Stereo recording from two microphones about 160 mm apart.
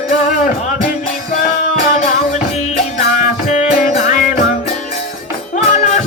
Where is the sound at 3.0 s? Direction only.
50° left (ahead or behind).